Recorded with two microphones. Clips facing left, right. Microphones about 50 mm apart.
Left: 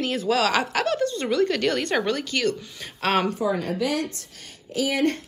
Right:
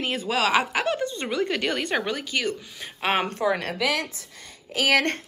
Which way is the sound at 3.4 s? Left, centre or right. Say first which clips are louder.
Even; right.